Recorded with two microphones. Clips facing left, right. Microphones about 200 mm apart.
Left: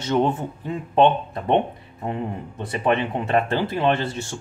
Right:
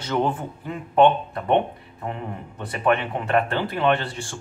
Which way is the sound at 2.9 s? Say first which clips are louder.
Even; 20° left (ahead or behind).